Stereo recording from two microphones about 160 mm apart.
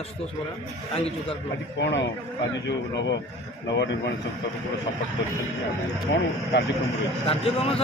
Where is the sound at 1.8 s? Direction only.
90° left.